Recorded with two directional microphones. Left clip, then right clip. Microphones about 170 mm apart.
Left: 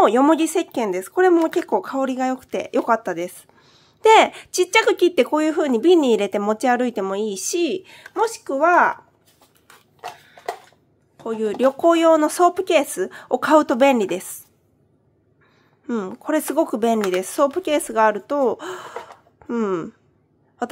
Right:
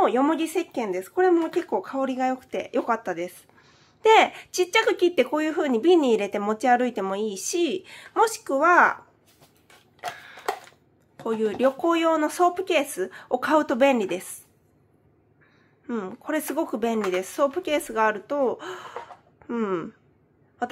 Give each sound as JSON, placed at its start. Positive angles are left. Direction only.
{"t": 0.0, "sound": "speech", "side_deg": 30}
{"t": 11.5, "sound": "speech", "side_deg": 25}
{"t": 15.9, "sound": "speech", "side_deg": 30}